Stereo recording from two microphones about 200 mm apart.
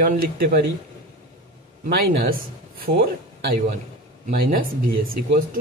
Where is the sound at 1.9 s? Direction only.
45° right (ahead or behind).